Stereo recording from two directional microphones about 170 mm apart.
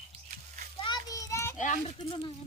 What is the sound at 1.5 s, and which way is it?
Speech, 45° left (ahead or behind).